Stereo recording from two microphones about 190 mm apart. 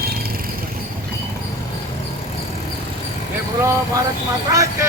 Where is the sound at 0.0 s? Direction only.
55° right (ahead or behind).